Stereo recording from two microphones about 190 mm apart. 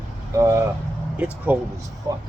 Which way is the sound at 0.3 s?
15° right (ahead or behind).